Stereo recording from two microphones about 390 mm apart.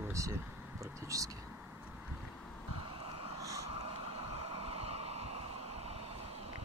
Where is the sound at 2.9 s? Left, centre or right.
Centre.